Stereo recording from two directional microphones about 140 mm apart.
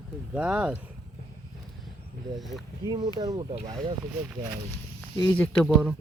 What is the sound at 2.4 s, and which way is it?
Speech, centre (ahead or behind).